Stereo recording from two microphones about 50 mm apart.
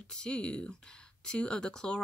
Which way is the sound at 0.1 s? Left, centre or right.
Centre.